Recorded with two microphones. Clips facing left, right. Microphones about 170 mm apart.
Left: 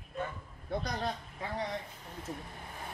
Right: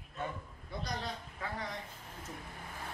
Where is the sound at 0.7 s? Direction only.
55° left (ahead or behind).